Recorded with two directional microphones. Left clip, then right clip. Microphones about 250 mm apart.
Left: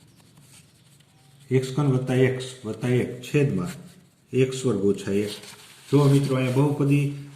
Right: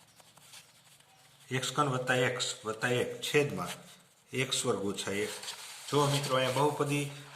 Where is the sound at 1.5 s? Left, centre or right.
Centre.